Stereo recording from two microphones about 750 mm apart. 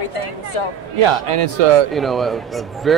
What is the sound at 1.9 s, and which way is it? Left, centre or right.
Speech, centre.